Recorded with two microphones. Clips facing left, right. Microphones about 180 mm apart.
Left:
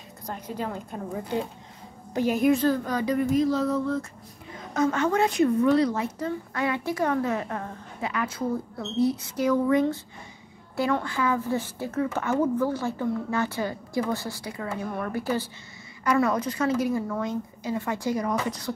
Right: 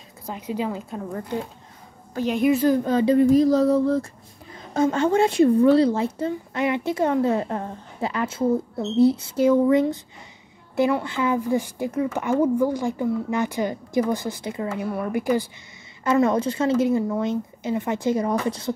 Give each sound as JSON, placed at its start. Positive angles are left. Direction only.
{"t": 0.3, "sound": "a woman's voice", "side_deg": -10}
{"t": 2.8, "sound": "a sound", "side_deg": -25}
{"t": 4.7, "sound": "a woman's voice", "side_deg": -30}
{"t": 14.9, "sound": "a woman's voice", "side_deg": -10}
{"t": 16.0, "sound": "speech", "side_deg": -25}